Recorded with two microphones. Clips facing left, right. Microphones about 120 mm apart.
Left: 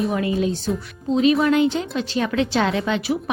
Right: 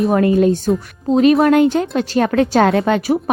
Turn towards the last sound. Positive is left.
turn(degrees=-45)  # may be behind; listen again after turning